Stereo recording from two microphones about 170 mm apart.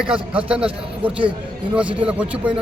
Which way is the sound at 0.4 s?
5° right (ahead or behind).